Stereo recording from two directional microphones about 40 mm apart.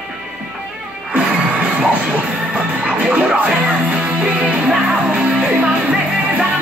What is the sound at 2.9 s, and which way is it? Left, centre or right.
Music, right.